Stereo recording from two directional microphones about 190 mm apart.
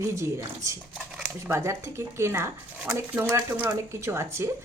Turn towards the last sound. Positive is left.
turn(degrees=-15)  # may be behind; listen again after turning